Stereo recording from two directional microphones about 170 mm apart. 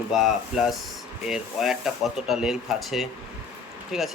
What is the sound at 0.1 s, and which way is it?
Speech, centre (ahead or behind).